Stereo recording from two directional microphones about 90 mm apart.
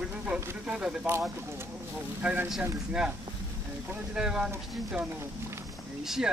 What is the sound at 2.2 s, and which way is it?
Speech, 15° right (ahead or behind).